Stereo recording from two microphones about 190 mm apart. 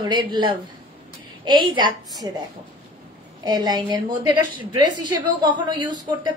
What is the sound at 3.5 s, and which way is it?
Speech, 20° right (ahead or behind).